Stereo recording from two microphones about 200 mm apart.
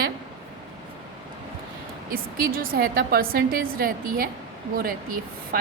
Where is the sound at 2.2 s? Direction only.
45° right (ahead or behind).